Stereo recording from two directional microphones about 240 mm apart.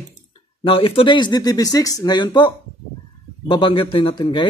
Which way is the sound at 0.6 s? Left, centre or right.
Left.